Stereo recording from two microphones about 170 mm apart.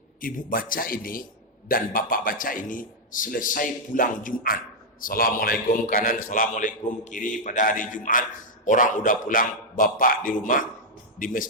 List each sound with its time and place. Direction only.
0.2 s a man's voice: 55° left (ahead or behind)